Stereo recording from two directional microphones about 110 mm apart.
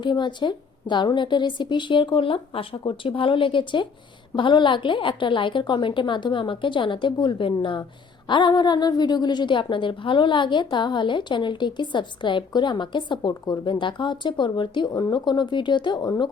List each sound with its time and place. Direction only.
0.0 s a woman's voice: 45° left (ahead or behind)